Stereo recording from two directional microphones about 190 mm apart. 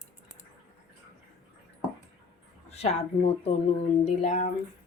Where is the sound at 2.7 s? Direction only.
35° left (ahead or behind).